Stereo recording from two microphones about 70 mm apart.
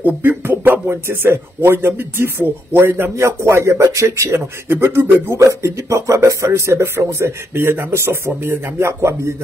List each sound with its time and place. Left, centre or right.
0.0 s speech: right
3.3 s speech: right